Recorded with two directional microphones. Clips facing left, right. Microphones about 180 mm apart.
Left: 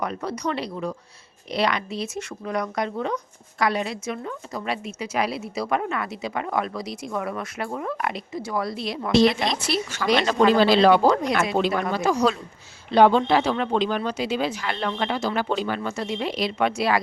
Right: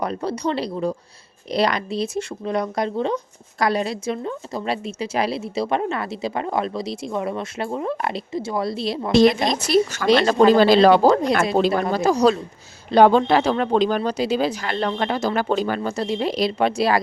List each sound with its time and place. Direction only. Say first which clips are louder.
0.0 s a woman's voice: right 4 dB; 30° right (ahead or behind)
9.1 s speech: right 3 dB; 45° right (ahead or behind)
10.1 s speech: right 4 dB; 30° right (ahead or behind)